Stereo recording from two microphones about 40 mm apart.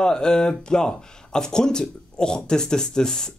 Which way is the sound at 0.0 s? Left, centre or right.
Centre.